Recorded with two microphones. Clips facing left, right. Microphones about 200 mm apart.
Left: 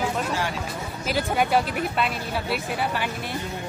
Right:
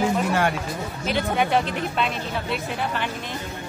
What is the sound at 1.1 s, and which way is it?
A woman's voice, 5° left (ahead or behind).